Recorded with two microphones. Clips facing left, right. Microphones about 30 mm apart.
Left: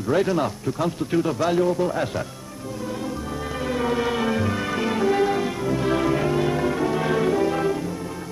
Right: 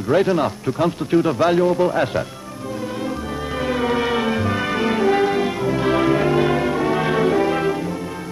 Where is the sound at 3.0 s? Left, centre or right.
Right.